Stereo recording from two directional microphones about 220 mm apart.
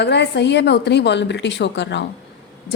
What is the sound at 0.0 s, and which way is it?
Speech, 50° left (ahead or behind).